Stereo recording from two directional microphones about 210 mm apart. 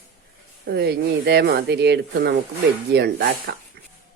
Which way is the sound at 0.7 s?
50° right (ahead or behind).